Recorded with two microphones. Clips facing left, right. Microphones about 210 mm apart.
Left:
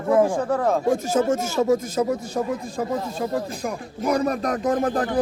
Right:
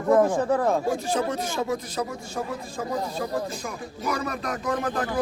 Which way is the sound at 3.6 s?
50° left (ahead or behind).